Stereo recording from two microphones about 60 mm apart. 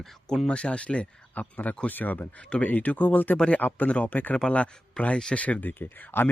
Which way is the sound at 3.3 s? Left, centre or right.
Centre.